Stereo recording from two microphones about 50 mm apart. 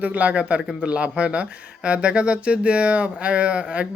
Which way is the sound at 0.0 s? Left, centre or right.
Right.